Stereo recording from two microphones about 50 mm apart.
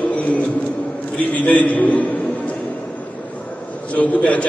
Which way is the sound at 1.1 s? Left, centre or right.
Left.